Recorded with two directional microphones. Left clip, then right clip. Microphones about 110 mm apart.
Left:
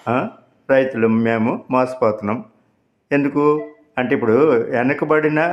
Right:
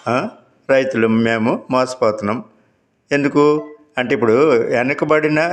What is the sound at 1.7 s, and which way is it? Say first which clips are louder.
Speech: even; 20° right (ahead or behind).